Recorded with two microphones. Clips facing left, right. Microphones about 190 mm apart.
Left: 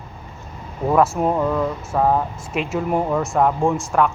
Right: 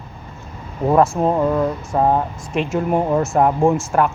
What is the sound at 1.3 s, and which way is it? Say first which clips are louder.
Mantra: right 3 dB; 15° right (ahead or behind).